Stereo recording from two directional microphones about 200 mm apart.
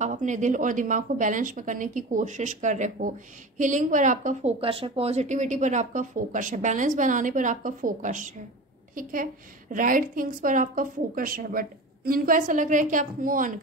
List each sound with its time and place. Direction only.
0.0 s a woman's voice: 40° right (ahead or behind)